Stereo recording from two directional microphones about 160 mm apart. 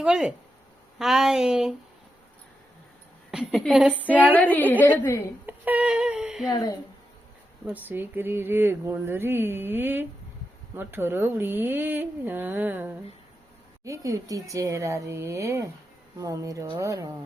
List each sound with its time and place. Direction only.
0.0 s speech: 5° right (ahead or behind)
3.3 s a woman's voice: 5° left (ahead or behind)
4.0 s speech: 10° right (ahead or behind)
4.4 s a woman's voice: 10° left (ahead or behind)
5.5 s music: 10° right (ahead or behind)
6.5 s speech: 25° left (ahead or behind)
7.6 s speech: 10° right (ahead or behind)